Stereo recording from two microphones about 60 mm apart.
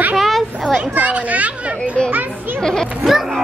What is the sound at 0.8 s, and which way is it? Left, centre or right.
A child's voice, right.